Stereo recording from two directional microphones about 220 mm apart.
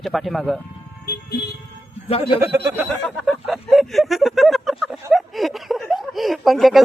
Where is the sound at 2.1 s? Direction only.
25° left (ahead or behind).